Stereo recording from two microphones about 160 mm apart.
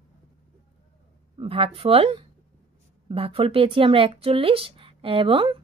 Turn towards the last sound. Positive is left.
turn(degrees=-35)  # may be behind; listen again after turning